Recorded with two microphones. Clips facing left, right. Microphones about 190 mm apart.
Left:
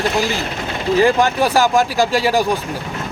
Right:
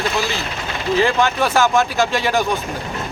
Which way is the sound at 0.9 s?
40° left (ahead or behind).